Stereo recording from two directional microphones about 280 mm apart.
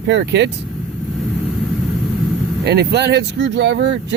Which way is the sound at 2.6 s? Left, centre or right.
Right.